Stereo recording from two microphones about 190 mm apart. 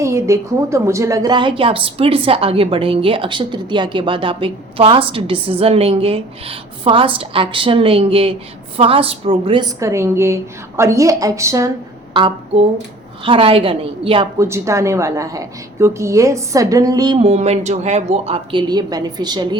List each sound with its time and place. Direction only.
0.0 s a woman's voice: 15° right (ahead or behind)
12.1 s a woman's voice: 25° right (ahead or behind)
14.3 s a woman's voice: 15° right (ahead or behind)